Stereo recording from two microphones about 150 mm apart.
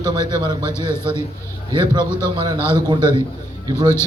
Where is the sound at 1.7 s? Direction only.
30° right (ahead or behind).